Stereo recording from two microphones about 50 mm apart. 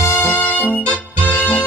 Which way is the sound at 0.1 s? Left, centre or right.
Left.